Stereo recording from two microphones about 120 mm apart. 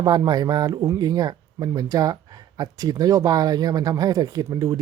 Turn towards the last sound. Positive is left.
turn(degrees=-30)  # may be behind; listen again after turning